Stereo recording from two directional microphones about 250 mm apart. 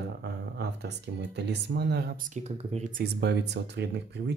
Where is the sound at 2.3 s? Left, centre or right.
Right.